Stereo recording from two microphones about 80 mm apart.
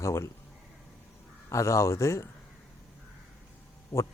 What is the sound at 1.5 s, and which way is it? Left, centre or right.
Speech, left.